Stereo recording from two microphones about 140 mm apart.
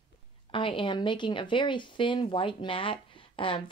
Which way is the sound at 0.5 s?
35° left (ahead or behind).